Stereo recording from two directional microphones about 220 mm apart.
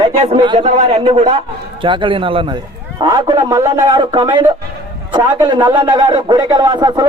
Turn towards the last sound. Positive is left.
turn(degrees=-20)  # may be behind; listen again after turning